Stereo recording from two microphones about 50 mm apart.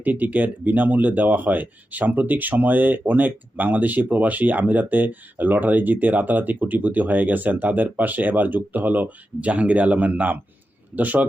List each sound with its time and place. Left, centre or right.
0.0 s speech: right